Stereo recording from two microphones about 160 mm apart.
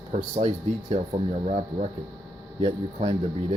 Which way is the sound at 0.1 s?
45° right (ahead or behind).